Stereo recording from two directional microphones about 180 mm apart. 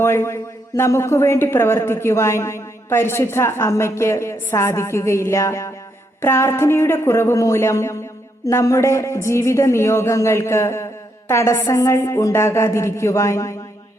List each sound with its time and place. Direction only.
0.0 s a woman's voice: 15° left (ahead or behind)